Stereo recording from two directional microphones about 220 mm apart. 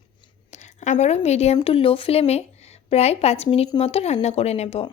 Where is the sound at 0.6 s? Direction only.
30° left (ahead or behind).